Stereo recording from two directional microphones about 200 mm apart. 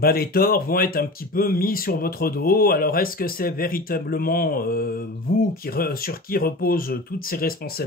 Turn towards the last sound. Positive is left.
turn(degrees=50)  # may be behind; listen again after turning